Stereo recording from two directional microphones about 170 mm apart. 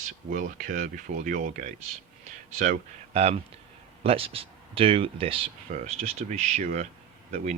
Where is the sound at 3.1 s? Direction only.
35° right (ahead or behind).